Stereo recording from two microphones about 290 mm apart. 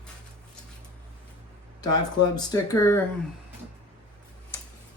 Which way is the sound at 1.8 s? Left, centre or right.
Centre.